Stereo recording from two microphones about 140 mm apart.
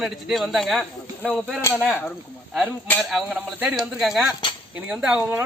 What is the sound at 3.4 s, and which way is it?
A man's voice, 10° right (ahead or behind).